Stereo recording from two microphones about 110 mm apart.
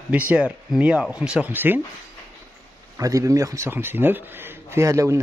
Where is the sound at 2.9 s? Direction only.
30° right (ahead or behind).